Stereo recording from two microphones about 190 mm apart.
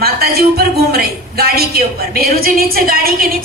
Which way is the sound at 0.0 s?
55° right (ahead or behind).